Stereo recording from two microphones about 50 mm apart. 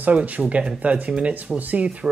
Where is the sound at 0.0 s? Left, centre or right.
Right.